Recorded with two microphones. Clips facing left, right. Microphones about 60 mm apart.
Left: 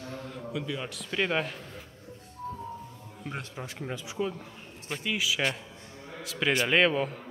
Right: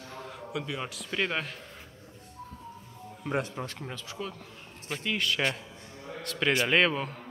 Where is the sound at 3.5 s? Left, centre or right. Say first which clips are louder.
Left 1 dB; centre.